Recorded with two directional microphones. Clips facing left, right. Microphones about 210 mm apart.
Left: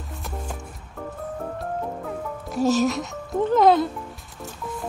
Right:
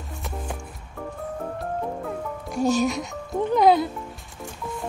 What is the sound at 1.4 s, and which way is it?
Music, centre (ahead or behind).